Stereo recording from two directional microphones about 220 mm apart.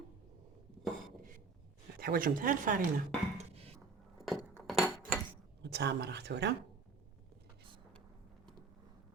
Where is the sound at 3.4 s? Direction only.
25° right (ahead or behind).